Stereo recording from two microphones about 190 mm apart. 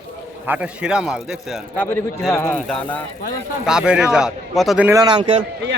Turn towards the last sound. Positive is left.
turn(degrees=-25)  # may be behind; listen again after turning